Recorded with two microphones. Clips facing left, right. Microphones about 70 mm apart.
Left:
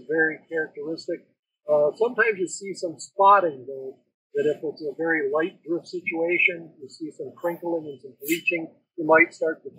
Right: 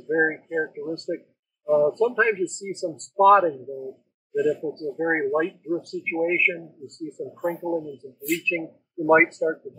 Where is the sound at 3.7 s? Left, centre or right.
Left.